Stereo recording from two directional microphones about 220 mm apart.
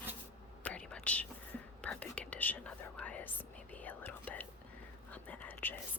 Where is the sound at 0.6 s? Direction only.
5° left (ahead or behind).